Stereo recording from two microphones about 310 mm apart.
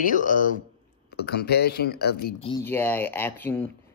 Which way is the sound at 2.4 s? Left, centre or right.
Centre.